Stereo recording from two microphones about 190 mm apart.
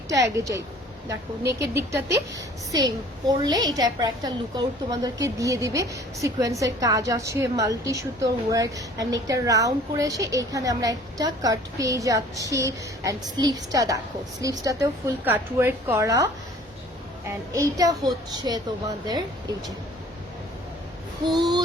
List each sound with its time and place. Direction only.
0.3 s a woman's voice: 15° right (ahead or behind)
21.3 s a woman's voice: 20° right (ahead or behind)